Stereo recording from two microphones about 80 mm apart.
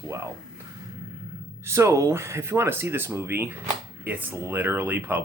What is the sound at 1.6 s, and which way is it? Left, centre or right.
Speech, right.